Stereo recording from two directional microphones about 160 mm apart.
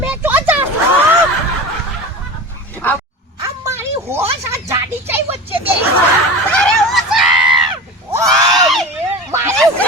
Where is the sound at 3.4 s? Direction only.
15° right (ahead or behind).